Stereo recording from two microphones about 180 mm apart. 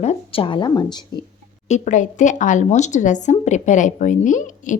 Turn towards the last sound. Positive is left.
turn(degrees=45)  # may be behind; listen again after turning